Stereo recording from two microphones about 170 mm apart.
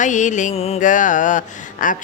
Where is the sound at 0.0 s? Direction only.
45° left (ahead or behind).